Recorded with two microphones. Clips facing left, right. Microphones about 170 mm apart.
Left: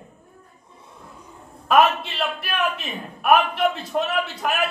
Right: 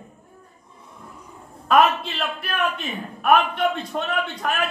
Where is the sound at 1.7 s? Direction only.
Centre (ahead or behind).